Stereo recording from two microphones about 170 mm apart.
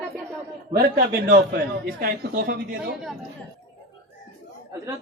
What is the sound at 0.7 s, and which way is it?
A woman's voice, 60° right (ahead or behind).